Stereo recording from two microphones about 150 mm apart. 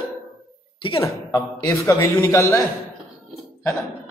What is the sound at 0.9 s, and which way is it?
A man's voice, 20° left (ahead or behind).